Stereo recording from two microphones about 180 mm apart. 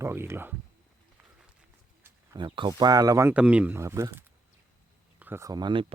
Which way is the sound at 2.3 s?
25° right (ahead or behind).